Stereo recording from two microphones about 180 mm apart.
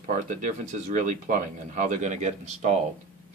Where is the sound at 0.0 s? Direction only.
45° right (ahead or behind).